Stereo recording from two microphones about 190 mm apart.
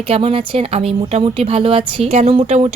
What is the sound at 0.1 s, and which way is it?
Speech, 30° right (ahead or behind).